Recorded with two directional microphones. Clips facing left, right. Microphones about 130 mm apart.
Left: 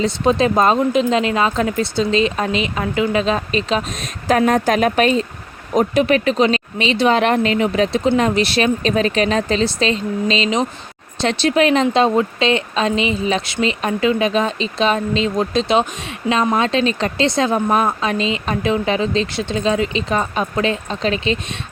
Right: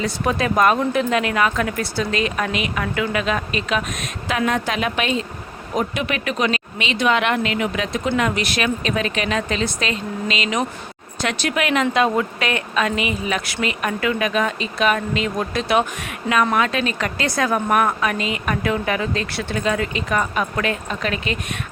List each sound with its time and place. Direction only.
0.0 s speech: 25° left (ahead or behind)